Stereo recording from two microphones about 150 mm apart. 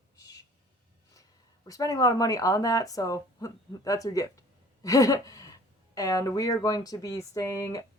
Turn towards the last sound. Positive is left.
turn(degrees=20)  # may be behind; listen again after turning